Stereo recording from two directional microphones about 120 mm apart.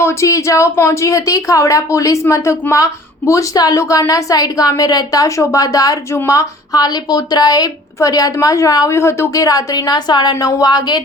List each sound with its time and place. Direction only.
0.0 s a woman's voice: 25° left (ahead or behind)